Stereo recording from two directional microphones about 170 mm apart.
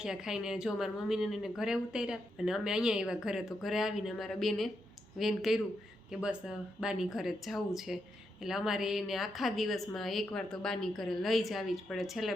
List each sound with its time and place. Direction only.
0.0 s speech: 5° right (ahead or behind)